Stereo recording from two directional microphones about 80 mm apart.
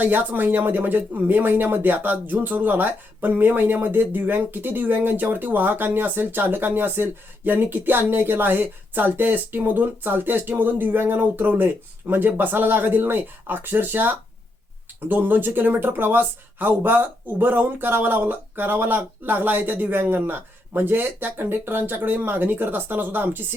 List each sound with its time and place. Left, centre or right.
0.0 s speech: right